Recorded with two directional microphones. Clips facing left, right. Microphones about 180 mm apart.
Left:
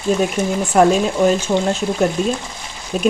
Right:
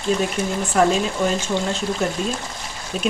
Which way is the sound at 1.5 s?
45° left (ahead or behind).